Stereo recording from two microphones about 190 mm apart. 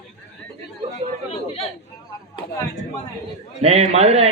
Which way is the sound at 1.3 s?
35° left (ahead or behind).